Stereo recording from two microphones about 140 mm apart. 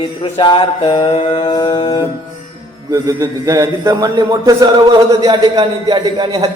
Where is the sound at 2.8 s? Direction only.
25° right (ahead or behind).